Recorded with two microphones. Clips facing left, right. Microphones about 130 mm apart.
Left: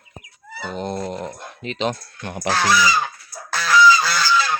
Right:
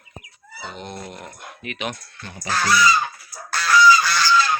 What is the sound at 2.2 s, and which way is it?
Speech, 60° left (ahead or behind).